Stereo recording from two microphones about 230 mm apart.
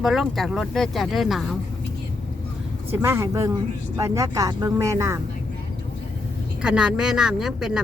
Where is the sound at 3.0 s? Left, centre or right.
Centre.